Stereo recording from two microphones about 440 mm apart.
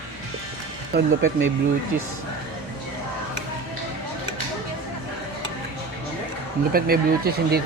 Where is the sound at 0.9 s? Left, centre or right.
Right.